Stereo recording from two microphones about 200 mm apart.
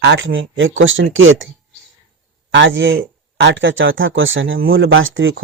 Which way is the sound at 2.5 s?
65° right (ahead or behind).